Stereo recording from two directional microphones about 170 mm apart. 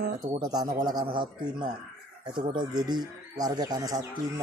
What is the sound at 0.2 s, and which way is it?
Speech, 25° right (ahead or behind).